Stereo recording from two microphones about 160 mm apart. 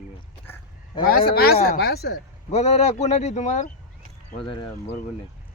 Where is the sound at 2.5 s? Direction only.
40° left (ahead or behind).